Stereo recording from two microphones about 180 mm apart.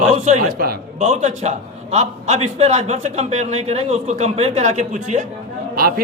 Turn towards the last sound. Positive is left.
turn(degrees=-55)  # may be behind; listen again after turning